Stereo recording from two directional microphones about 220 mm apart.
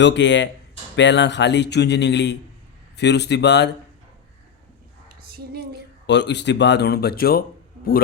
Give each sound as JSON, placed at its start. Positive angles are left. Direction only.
{"t": 0.0, "sound": "speech", "side_deg": 55}
{"t": 5.0, "sound": "a sound", "side_deg": -45}
{"t": 6.1, "sound": "speech", "side_deg": 50}